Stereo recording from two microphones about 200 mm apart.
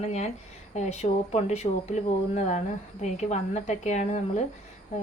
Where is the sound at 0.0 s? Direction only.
35° left (ahead or behind).